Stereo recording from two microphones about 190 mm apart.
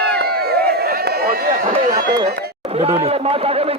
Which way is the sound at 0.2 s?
55° right (ahead or behind).